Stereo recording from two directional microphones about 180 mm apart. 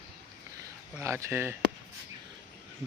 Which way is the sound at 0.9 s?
15° right (ahead or behind).